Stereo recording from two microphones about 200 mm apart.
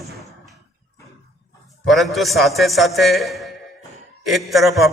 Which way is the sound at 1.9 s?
Centre (ahead or behind).